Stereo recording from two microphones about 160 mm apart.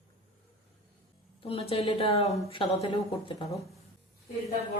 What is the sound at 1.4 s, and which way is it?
A woman's voice, 35° left (ahead or behind).